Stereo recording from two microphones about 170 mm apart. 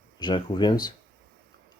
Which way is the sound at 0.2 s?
25° left (ahead or behind).